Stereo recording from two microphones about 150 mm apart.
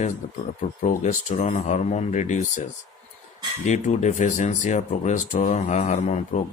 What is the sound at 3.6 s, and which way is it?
Speech, 50° left (ahead or behind).